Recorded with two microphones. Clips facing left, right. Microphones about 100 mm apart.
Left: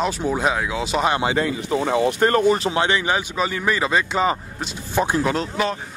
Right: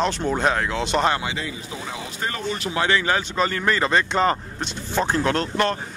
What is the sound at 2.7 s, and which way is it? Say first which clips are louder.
Speech: left 1 dB; 20° left (ahead or behind).